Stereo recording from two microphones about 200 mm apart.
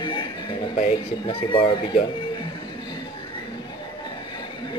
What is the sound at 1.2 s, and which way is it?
Speech, 25° left (ahead or behind).